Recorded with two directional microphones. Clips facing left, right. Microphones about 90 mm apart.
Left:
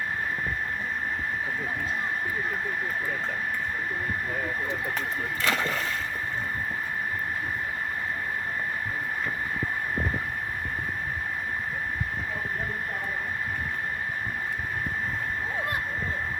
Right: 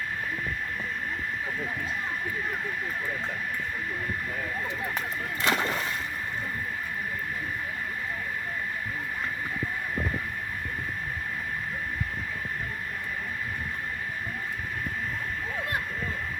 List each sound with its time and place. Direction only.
5.4 s speech: 20° right (ahead or behind)